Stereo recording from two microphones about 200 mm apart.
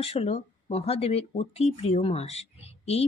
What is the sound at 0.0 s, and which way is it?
Speech, 30° left (ahead or behind).